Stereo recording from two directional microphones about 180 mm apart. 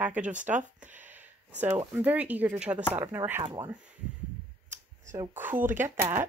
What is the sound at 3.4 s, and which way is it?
Speech, 25° right (ahead or behind).